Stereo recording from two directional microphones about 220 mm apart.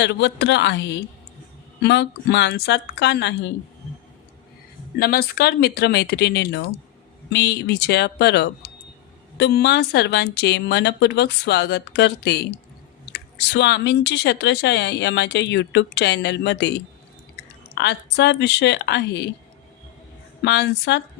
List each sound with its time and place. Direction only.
0.0 s speech: 50° left (ahead or behind)
4.9 s speech: 45° left (ahead or behind)
17.7 s speech: 50° left (ahead or behind)
20.4 s speech: 50° left (ahead or behind)